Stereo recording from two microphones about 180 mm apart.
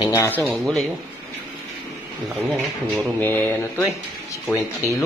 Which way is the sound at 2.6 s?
Centre (ahead or behind).